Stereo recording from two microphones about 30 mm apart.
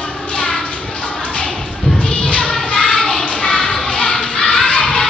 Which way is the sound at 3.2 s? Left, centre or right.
Left.